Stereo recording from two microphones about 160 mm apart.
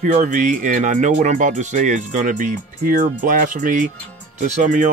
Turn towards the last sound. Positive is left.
turn(degrees=-50)  # may be behind; listen again after turning